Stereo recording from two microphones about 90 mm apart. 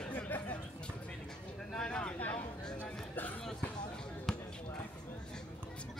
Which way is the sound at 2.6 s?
20° left (ahead or behind).